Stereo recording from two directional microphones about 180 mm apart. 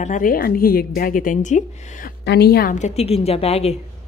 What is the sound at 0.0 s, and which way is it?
A woman's voice, 45° left (ahead or behind).